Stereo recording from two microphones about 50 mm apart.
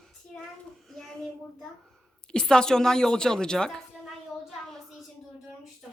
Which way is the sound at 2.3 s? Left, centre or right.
Centre.